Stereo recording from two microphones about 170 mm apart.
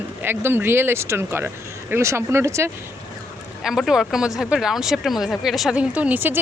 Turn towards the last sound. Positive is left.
turn(degrees=-10)  # may be behind; listen again after turning